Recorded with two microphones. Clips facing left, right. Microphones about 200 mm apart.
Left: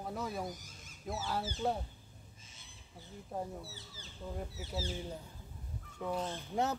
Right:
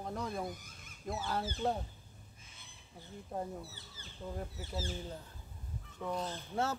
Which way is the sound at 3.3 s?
Centre (ahead or behind).